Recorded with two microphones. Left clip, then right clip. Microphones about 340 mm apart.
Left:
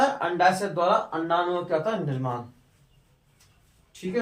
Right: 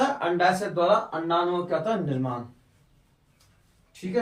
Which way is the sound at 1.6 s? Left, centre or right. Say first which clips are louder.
Even; centre.